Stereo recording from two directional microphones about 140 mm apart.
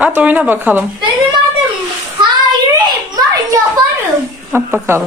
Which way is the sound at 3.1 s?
30° right (ahead or behind).